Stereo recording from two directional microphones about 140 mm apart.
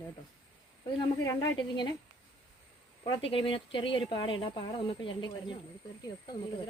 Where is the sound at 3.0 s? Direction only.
35° left (ahead or behind).